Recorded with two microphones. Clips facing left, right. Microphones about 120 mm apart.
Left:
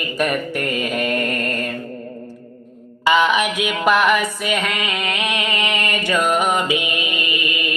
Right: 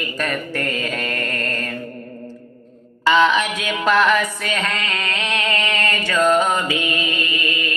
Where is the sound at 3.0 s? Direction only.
15° left (ahead or behind).